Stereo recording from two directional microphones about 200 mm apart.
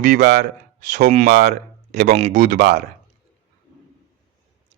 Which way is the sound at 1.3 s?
55° right (ahead or behind).